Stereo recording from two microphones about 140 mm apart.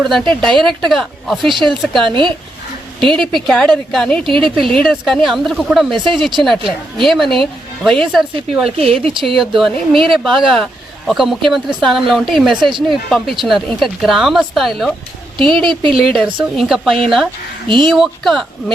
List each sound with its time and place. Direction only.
0.0 s speech: centre (ahead or behind)
17.7 s speech: 35° right (ahead or behind)
17.9 s speech: centre (ahead or behind)